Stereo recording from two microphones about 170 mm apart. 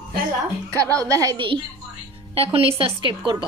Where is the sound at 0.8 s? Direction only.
20° right (ahead or behind).